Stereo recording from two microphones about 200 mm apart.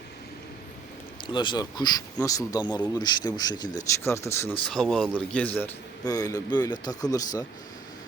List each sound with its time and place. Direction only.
1.3 s speech: 25° left (ahead or behind)